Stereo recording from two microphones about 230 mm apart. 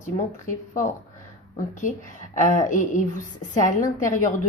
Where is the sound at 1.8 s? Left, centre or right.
Left.